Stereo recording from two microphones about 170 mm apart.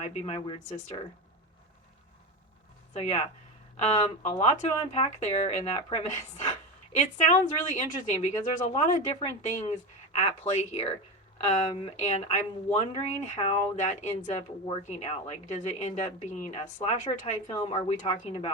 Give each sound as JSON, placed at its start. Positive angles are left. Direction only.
{"t": 0.0, "sound": "a woman's voice", "side_deg": 40}
{"t": 2.9, "sound": "a woman's voice", "side_deg": 40}